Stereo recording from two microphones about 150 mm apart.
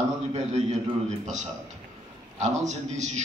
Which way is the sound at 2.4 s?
50° right (ahead or behind).